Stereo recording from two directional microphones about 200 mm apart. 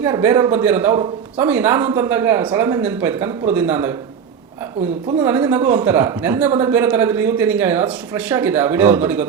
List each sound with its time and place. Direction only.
0.0 s speech: 10° right (ahead or behind)
5.1 s speech: 10° right (ahead or behind)